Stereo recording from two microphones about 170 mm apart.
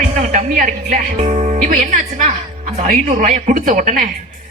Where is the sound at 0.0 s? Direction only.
45° right (ahead or behind).